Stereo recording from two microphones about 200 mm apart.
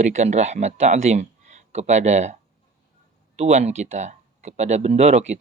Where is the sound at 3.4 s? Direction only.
35° right (ahead or behind).